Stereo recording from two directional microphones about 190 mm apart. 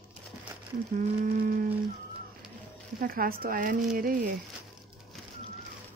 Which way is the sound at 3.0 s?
50° right (ahead or behind).